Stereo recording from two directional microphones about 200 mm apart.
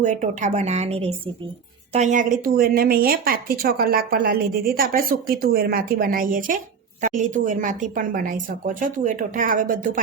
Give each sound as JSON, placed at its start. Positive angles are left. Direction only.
{"t": 0.0, "sound": "speech", "side_deg": -35}